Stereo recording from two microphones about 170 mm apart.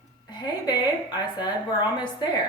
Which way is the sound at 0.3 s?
25° left (ahead or behind).